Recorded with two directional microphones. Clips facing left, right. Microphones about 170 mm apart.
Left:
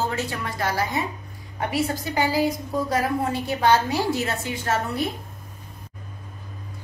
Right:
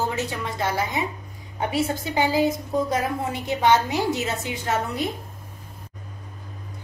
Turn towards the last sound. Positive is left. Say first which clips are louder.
# even
turn(degrees=-15)  # may be behind; listen again after turning